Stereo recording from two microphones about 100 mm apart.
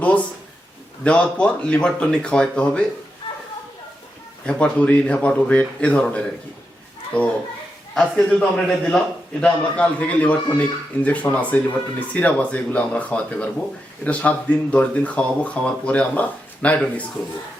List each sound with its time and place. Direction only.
0.0 s a man's voice: 15° left (ahead or behind)
4.4 s a man's voice: 10° left (ahead or behind)
8.1 s a man's voice: 10° left (ahead or behind)